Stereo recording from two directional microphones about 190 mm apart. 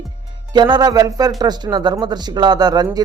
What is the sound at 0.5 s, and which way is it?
A man's voice, 20° right (ahead or behind).